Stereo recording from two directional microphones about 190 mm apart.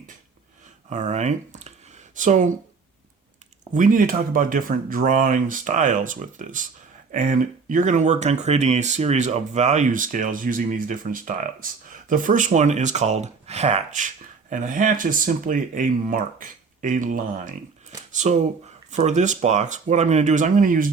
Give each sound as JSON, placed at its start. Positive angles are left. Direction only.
{"t": 0.9, "sound": "speech", "side_deg": -40}
{"t": 3.7, "sound": "speech", "side_deg": -45}